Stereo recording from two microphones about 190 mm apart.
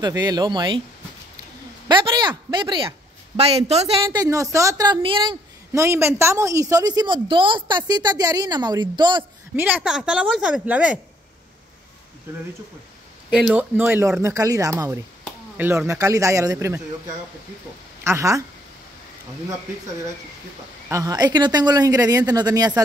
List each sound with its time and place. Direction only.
0.0 s a woman's voice: 20° right (ahead or behind)
1.9 s a sound: 25° right (ahead or behind)
3.3 s a woman's voice: 35° right (ahead or behind)
4.1 s a woman's voice: 20° right (ahead or behind)
5.7 s a woman's voice: 15° right (ahead or behind)
9.6 s speech: 10° right (ahead or behind)
13.3 s speech: 5° right (ahead or behind)
18.0 s speech: 15° right (ahead or behind)
20.9 s a woman's voice: 20° right (ahead or behind)